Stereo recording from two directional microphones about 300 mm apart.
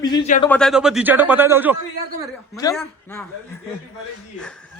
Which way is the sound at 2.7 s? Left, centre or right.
Centre.